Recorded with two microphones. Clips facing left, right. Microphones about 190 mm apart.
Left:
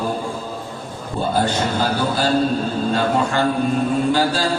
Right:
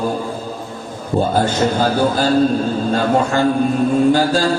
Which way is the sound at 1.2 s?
45° right (ahead or behind).